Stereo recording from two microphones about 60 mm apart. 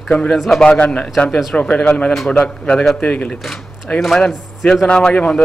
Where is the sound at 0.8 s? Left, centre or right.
Left.